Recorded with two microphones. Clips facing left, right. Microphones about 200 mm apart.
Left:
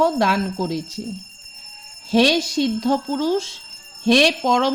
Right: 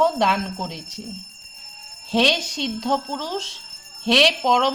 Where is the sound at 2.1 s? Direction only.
10° left (ahead or behind).